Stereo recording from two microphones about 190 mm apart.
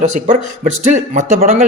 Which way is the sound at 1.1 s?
45° right (ahead or behind).